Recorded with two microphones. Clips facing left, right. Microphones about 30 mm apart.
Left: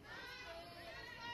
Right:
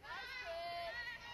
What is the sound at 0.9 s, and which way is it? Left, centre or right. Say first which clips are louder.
Run: right 6 dB; right.